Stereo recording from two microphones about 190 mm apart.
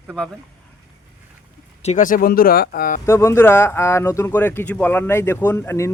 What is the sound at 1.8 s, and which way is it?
Speech, 40° left (ahead or behind).